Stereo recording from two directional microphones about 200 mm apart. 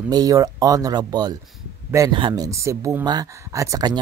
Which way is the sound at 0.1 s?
20° right (ahead or behind).